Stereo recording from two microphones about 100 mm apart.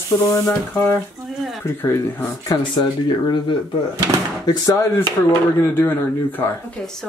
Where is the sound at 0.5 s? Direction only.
20° left (ahead or behind).